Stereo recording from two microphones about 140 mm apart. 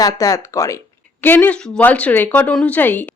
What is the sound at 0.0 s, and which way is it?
Speech, 25° left (ahead or behind).